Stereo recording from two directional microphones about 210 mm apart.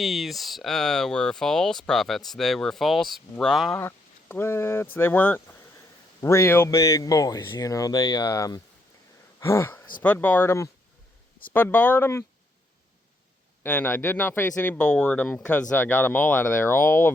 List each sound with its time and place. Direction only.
0.0 s speech: centre (ahead or behind)
13.6 s speech: 10° left (ahead or behind)